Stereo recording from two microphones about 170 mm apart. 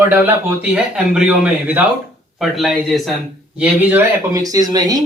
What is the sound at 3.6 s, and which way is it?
Speech, 15° right (ahead or behind).